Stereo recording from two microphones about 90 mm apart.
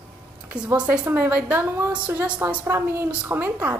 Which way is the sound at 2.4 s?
25° right (ahead or behind).